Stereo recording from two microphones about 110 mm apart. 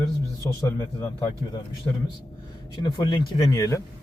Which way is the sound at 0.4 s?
30° left (ahead or behind).